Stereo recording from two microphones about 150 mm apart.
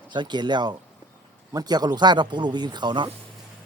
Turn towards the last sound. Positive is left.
turn(degrees=-30)  # may be behind; listen again after turning